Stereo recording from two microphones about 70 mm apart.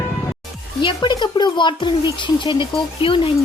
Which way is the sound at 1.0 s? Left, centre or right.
Left.